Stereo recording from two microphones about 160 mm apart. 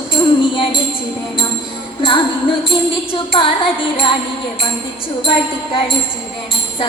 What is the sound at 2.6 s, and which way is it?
Music, 35° left (ahead or behind).